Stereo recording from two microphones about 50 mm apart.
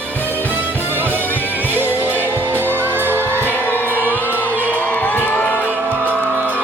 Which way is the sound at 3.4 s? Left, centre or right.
Left.